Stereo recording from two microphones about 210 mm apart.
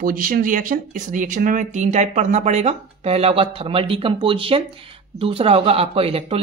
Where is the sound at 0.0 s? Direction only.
40° right (ahead or behind).